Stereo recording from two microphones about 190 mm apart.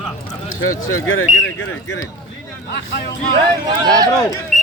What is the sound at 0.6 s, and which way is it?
Speech, 90° left.